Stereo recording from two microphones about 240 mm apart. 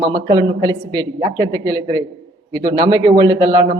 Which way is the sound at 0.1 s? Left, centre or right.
Centre.